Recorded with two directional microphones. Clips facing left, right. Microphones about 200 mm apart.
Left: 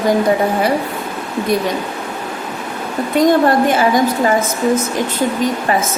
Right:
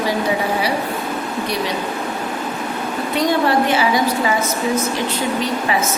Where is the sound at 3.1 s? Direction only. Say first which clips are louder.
Left 5 dB; 50° left (ahead or behind).